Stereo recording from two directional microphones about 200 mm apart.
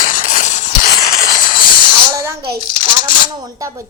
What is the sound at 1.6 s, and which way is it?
Music, 25° left (ahead or behind).